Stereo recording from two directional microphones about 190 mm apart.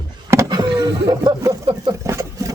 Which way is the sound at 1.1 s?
20° right (ahead or behind).